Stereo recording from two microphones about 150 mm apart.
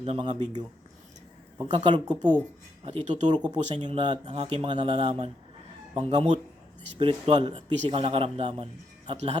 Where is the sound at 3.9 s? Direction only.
35° right (ahead or behind).